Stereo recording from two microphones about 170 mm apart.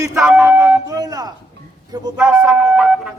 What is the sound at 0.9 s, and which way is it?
Speech, 20° right (ahead or behind).